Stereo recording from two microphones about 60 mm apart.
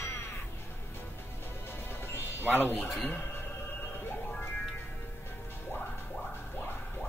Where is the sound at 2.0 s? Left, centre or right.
Left.